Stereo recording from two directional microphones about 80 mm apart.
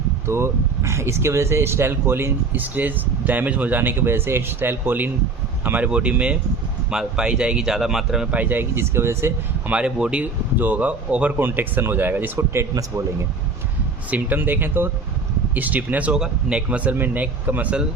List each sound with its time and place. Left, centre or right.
0.3 s speech: right; by 8.3 s centre
8.3 s speech: right
9.6 s speech: centre; by 12.6 s right
12.7 s speech: right
14.1 s speech: right